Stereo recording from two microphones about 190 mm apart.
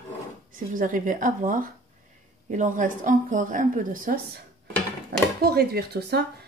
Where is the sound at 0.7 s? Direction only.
45° right (ahead or behind).